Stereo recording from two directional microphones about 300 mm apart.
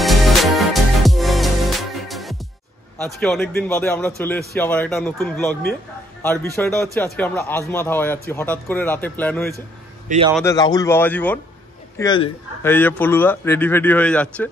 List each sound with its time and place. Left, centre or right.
0.0 s music: centre
3.0 s a man's voice: centre
10.0 s a man's voice: right
10.3 s a man's voice: centre